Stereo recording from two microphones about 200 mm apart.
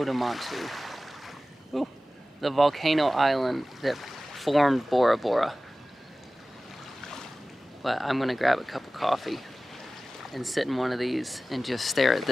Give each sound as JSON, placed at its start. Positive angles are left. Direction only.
{"t": 0.0, "sound": "a sound", "side_deg": 0}
{"t": 2.4, "sound": "speech", "side_deg": 0}
{"t": 7.8, "sound": "speech", "side_deg": 0}